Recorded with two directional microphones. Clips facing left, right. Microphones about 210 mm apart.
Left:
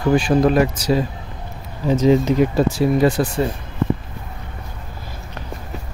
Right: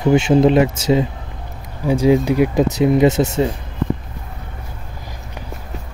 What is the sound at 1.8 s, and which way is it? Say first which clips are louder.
Speech: right 1 dB; 10° right (ahead or behind).